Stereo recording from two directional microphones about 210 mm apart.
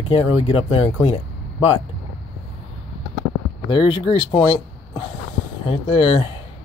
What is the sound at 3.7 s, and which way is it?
Speech, 25° left (ahead or behind).